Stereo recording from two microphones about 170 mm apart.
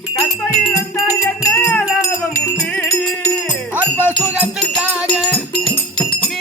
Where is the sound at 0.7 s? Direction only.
15° left (ahead or behind).